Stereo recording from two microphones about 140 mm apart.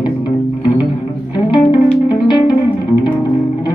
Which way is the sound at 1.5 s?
35° left (ahead or behind).